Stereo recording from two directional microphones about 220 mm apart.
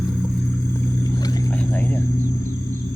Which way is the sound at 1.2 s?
15° left (ahead or behind).